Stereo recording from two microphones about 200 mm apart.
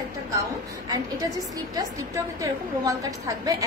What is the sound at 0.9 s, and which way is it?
A woman's voice, 15° right (ahead or behind).